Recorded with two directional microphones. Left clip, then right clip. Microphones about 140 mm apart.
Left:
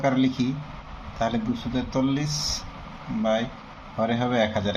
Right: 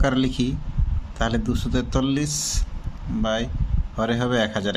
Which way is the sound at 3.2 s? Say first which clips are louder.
Left 1 dB; 75° right (ahead or behind).